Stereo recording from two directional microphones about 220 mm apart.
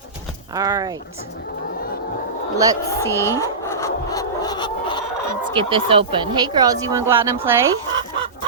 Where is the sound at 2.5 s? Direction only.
15° right (ahead or behind).